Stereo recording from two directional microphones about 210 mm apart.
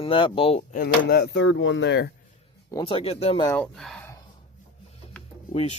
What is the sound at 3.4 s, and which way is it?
Speech, 5° left (ahead or behind).